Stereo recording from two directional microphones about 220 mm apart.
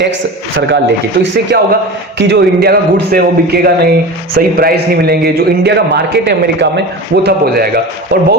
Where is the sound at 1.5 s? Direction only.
45° right (ahead or behind).